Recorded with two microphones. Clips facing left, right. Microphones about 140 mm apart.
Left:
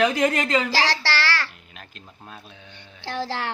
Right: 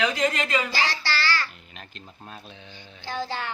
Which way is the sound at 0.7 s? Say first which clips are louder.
Left 4 dB; 85° left.